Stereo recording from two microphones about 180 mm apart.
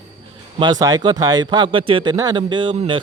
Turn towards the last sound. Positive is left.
turn(degrees=-30)  # may be behind; listen again after turning